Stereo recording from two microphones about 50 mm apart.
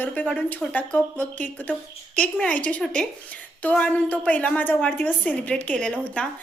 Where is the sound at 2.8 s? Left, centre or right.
Centre.